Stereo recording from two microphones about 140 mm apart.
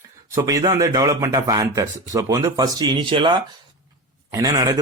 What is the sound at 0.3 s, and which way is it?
A man's voice, 25° right (ahead or behind).